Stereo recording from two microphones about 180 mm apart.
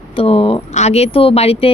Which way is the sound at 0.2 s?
30° left (ahead or behind).